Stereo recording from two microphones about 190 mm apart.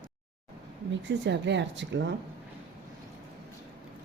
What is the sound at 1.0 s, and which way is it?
Speech, 70° right (ahead or behind).